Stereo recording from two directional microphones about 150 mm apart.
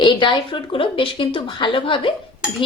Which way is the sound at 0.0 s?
35° left (ahead or behind).